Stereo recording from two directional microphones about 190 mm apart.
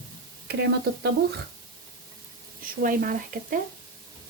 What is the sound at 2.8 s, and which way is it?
Speech, 45° right (ahead or behind).